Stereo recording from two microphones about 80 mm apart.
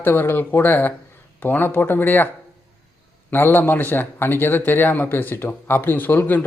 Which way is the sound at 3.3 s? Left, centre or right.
Left.